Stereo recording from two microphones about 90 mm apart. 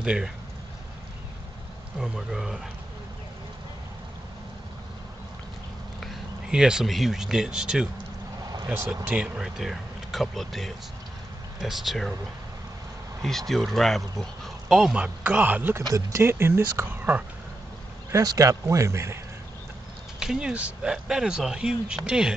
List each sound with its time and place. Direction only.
0.0 s speech: 10° right (ahead or behind)
2.0 s speech: 5° right (ahead or behind)
5.9 s speech: centre (ahead or behind)
9.1 s speech: 15° right (ahead or behind)
9.6 s speech: centre (ahead or behind)
13.2 s speech: 5° left (ahead or behind); by 15.8 s 20° right (ahead or behind)
15.8 s a man's voice: 40° right (ahead or behind)
16.2 s speech: 25° right (ahead or behind)
18.1 s a man's voice: 40° right (ahead or behind)
20.2 s speech: 10° right (ahead or behind)